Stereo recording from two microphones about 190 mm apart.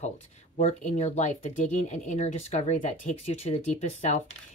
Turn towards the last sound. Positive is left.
turn(degrees=35)  # may be behind; listen again after turning